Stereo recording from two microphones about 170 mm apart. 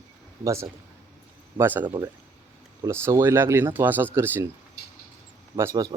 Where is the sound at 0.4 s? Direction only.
15° right (ahead or behind).